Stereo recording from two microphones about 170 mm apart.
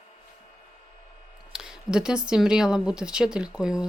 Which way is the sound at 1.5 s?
5° right (ahead or behind).